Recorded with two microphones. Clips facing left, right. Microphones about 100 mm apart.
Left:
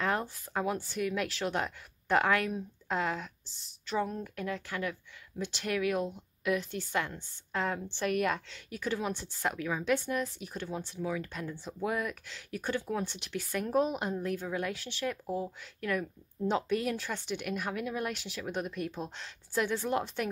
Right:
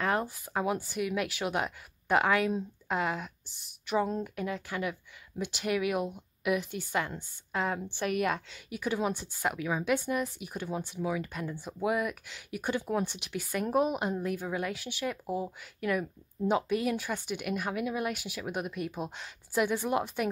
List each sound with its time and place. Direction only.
0.0 s speech: 5° right (ahead or behind)